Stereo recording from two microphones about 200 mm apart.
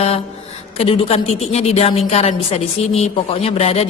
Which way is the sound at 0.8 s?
30° left (ahead or behind).